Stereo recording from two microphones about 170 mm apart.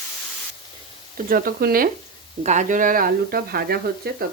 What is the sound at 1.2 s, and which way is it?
Speech, 60° right (ahead or behind).